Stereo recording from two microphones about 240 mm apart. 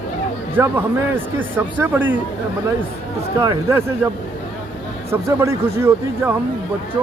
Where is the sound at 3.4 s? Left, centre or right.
Centre.